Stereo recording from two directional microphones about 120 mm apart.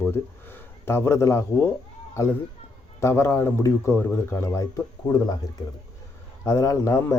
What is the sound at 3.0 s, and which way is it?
Speech, 20° left (ahead or behind).